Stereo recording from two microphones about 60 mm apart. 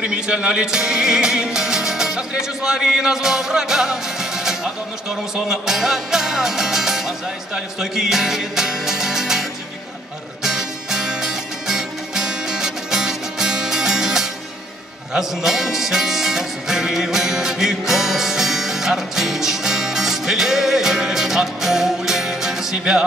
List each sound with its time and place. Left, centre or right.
0.0 s music: centre